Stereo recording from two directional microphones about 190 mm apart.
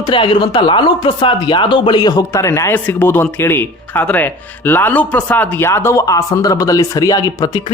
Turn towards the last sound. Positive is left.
turn(degrees=20)  # may be behind; listen again after turning